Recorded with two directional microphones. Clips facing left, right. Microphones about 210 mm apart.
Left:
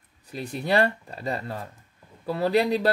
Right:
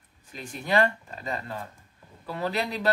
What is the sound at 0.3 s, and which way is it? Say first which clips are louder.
Speech: left 3 dB; 40° left (ahead or behind).